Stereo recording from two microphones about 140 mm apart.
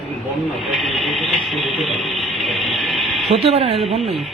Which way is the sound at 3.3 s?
45° right (ahead or behind).